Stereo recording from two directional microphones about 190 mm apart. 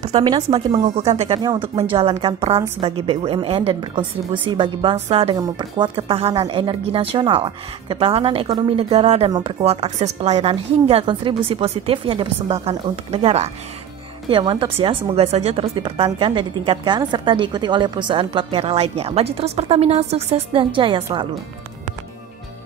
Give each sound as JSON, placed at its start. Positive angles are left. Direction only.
{"t": 0.0, "sound": "a woman's voice", "side_deg": -25}